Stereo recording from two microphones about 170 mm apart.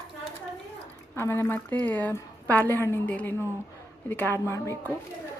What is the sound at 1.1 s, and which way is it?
A woman's voice, 15° left (ahead or behind).